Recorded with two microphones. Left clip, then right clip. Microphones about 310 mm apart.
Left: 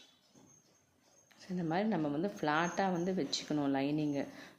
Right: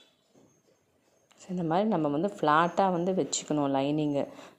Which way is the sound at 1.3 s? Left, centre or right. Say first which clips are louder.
Right 8 dB; right.